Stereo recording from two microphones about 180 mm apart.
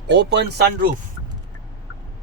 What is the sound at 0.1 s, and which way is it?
Speech, 70° right (ahead or behind).